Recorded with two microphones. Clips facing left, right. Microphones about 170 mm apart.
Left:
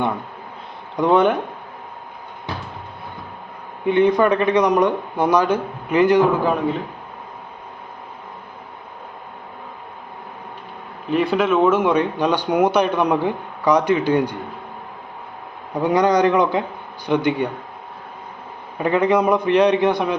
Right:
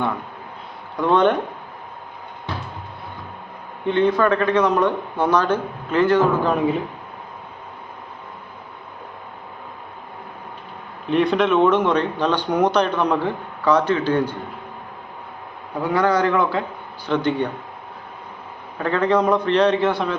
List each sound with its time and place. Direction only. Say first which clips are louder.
0.9 s speech: left 1 dB; 15° left (ahead or behind)
3.8 s speech: left 2 dB; 15° left (ahead or behind)
11.1 s speech: even; 5° left (ahead or behind)
15.8 s speech: left 3 dB; 20° left (ahead or behind)
18.8 s speech: left 2 dB; 15° left (ahead or behind)